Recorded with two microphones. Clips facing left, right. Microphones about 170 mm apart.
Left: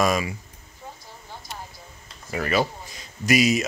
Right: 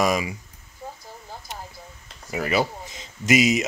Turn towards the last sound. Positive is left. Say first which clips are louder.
# right 1 dB
turn(degrees=-20)  # may be behind; listen again after turning